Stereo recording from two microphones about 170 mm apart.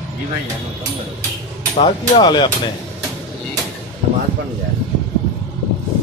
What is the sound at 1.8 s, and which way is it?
Speech, 25° left (ahead or behind).